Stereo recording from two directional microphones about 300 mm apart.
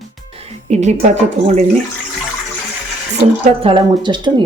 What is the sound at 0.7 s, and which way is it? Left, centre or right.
Speech, right.